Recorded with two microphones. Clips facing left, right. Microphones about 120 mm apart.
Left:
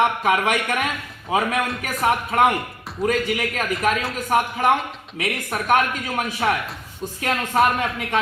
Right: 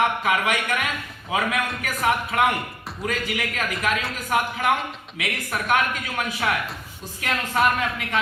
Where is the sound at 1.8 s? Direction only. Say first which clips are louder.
Even; 40° left (ahead or behind).